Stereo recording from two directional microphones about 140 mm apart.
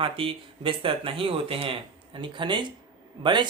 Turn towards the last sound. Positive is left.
turn(degrees=-35)  # may be behind; listen again after turning